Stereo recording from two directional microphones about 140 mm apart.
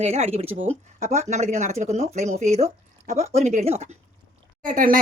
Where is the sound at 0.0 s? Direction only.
50° right (ahead or behind).